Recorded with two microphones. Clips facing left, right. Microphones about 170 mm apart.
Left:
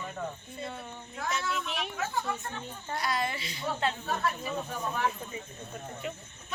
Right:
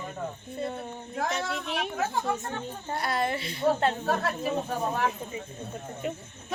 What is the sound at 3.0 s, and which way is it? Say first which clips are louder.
A woman's voice: right 3 dB; 55° right (ahead or behind).